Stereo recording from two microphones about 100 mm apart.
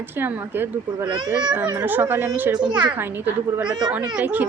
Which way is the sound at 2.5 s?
45° right (ahead or behind).